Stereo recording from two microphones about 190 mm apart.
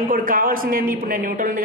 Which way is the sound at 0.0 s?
45° right (ahead or behind).